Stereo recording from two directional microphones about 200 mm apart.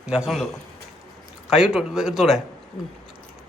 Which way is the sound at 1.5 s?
5° right (ahead or behind).